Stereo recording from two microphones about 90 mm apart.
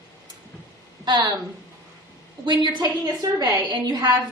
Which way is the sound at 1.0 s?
50° right (ahead or behind).